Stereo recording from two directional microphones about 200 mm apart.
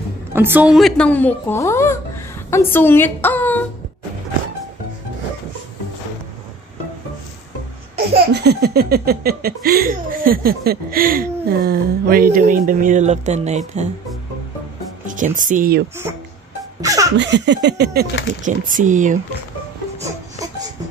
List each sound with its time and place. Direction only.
0.3 s a woman's voice: 10° right (ahead or behind); by 3.6 s 10° left (ahead or behind)
8.3 s speech: 55° right (ahead or behind); by 13.8 s 35° right (ahead or behind)
15.0 s speech: 40° right (ahead or behind)
16.8 s laughter: 15° right (ahead or behind)
17.2 s a sound: 60° right (ahead or behind)
18.4 s speech: 40° right (ahead or behind)